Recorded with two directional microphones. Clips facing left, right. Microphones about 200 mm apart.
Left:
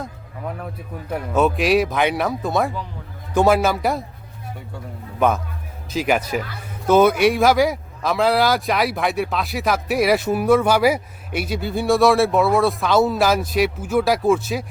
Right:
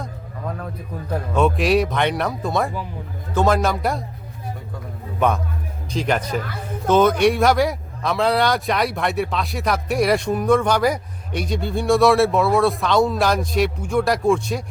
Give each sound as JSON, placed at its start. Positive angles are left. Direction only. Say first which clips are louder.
{"t": 1.1, "sound": "speech", "louder": "even", "side_deg": 5}
{"t": 5.2, "sound": "speech", "louder": "left 1 dB", "side_deg": 0}